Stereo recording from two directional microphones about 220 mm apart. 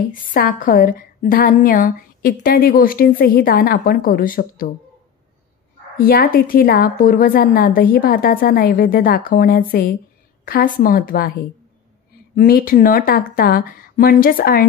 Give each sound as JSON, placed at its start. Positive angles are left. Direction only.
{"t": 0.1, "sound": "a woman's voice", "side_deg": 40}
{"t": 5.9, "sound": "a woman's voice", "side_deg": 40}
{"t": 12.4, "sound": "a woman's voice", "side_deg": 40}